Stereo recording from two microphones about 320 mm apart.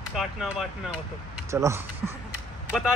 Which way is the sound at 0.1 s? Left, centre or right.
Centre.